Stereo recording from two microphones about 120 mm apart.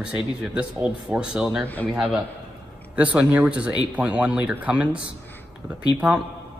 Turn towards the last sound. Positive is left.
turn(degrees=-10)  # may be behind; listen again after turning